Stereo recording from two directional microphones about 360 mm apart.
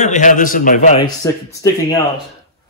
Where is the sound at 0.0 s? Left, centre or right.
Centre.